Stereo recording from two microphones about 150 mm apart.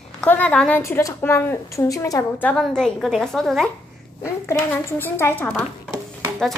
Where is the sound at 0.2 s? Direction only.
10° left (ahead or behind).